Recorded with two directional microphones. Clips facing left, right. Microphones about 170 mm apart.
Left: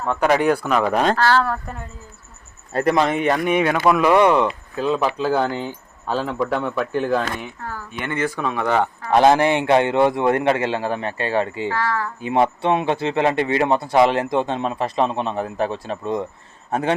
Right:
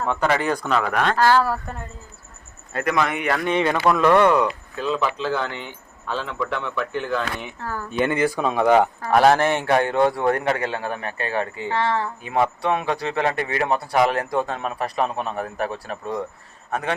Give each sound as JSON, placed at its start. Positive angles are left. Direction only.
{"t": 0.1, "sound": "speech", "side_deg": 10}
{"t": 0.8, "sound": "a man's voice", "side_deg": 25}
{"t": 1.2, "sound": "speech", "side_deg": -10}
{"t": 2.7, "sound": "a man's voice", "side_deg": 30}
{"t": 8.0, "sound": "speech", "side_deg": -15}
{"t": 9.0, "sound": "a man's voice", "side_deg": 20}
{"t": 11.7, "sound": "speech", "side_deg": -25}
{"t": 12.2, "sound": "a man's voice", "side_deg": 25}